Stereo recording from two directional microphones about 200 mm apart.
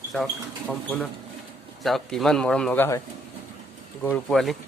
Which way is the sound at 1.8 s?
Centre (ahead or behind).